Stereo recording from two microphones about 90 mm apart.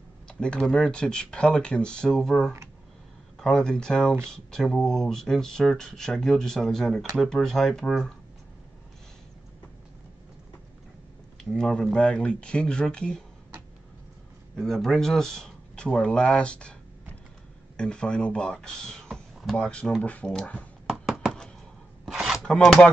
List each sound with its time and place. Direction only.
0.3 s speech: 10° left (ahead or behind)
11.5 s speech: 5° left (ahead or behind)
14.5 s speech: 5° left (ahead or behind)
17.7 s speech: 10° left (ahead or behind)
20.8 s a sound: 5° right (ahead or behind)
22.0 s chopping: 5° right (ahead or behind)
22.4 s speech: 5° left (ahead or behind)